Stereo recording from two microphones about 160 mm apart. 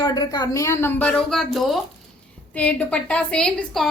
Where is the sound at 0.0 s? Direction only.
25° left (ahead or behind).